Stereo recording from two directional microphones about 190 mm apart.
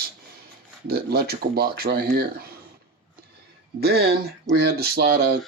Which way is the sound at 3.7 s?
55° right (ahead or behind).